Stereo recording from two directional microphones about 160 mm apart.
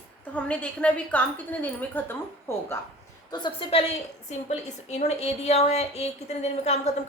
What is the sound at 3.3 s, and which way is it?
A woman's voice, 30° left (ahead or behind).